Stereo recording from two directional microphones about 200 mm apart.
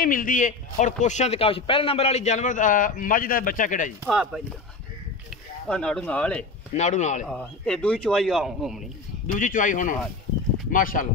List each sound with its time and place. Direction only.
0.0 s a man's voice: 45° left (ahead or behind)
4.0 s a man's voice: 5° right (ahead or behind)
5.7 s a man's voice: 5° left (ahead or behind)
6.7 s a man's voice: 35° left (ahead or behind)
7.2 s a man's voice: 5° left (ahead or behind)
9.4 s a man's voice: 40° left (ahead or behind)